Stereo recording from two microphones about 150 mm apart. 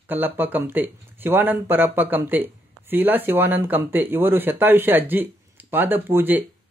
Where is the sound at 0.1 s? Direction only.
15° right (ahead or behind).